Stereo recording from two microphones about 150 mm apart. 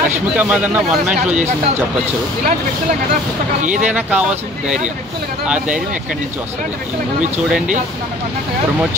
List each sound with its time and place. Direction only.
0.4 s speech: 10° right (ahead or behind)
3.6 s speech: 60° right (ahead or behind)
3.9 s speech: 5° right (ahead or behind)